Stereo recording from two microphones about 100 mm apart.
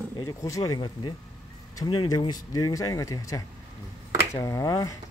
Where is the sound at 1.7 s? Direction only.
45° left (ahead or behind).